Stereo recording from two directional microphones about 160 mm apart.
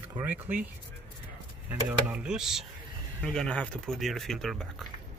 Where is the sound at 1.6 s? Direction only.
5° right (ahead or behind).